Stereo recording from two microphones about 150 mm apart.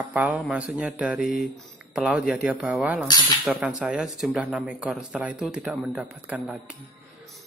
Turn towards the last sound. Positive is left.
turn(degrees=-5)  # may be behind; listen again after turning